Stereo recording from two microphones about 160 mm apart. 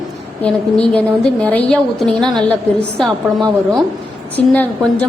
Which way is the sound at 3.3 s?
25° right (ahead or behind).